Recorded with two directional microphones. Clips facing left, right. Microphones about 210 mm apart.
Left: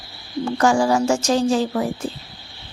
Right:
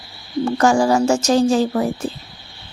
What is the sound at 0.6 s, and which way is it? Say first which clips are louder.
A woman's voice: right 2 dB; 45° right (ahead or behind).